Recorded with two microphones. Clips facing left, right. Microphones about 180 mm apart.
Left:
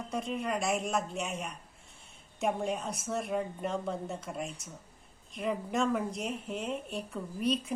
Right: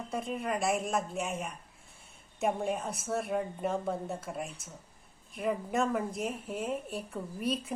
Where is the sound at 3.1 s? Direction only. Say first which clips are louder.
Right 1 dB; centre (ahead or behind).